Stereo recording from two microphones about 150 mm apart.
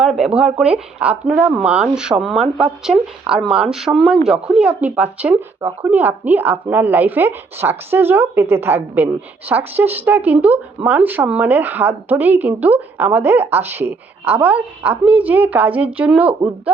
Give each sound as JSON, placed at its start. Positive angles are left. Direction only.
{"t": 0.0, "sound": "speech", "side_deg": -5}